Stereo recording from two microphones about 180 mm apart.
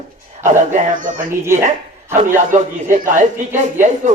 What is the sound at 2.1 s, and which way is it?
A man's voice, 45° right (ahead or behind).